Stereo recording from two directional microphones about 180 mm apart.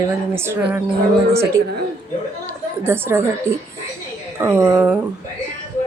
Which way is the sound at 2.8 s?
10° right (ahead or behind).